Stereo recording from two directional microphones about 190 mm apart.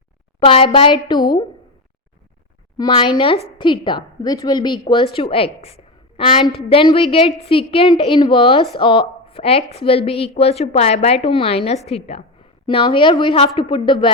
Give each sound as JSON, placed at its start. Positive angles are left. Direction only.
{"t": 0.3, "sound": "a woman's voice", "side_deg": 30}
{"t": 2.7, "sound": "a woman's voice", "side_deg": 25}